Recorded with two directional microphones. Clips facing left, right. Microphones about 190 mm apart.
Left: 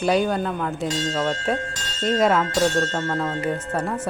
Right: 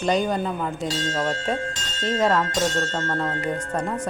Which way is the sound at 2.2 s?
10° left (ahead or behind).